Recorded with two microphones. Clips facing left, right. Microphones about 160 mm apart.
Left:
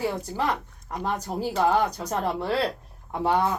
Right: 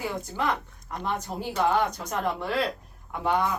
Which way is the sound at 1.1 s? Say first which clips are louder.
Left 3 dB; 35° left (ahead or behind).